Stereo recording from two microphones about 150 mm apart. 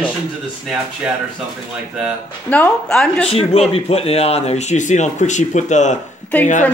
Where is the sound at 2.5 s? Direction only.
10° left (ahead or behind).